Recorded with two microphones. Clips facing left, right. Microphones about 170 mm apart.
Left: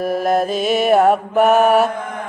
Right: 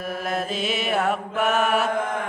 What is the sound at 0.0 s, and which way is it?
Mantra, 40° left (ahead or behind).